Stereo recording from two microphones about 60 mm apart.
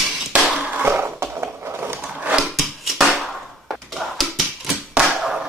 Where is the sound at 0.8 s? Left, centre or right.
Right.